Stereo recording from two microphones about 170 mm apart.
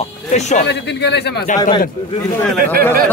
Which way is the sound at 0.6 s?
90° left.